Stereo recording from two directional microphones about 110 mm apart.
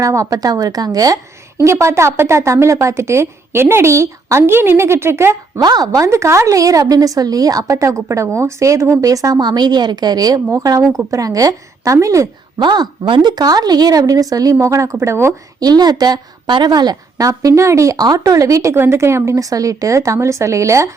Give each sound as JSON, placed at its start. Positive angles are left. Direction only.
{"t": 0.0, "sound": "a woman's voice", "side_deg": -30}
{"t": 5.5, "sound": "a woman's voice", "side_deg": -40}
{"t": 12.5, "sound": "a woman's voice", "side_deg": -40}
{"t": 15.6, "sound": "a woman's voice", "side_deg": -35}